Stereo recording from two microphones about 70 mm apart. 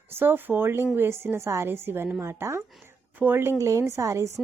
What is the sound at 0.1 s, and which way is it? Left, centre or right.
A woman's voice, right.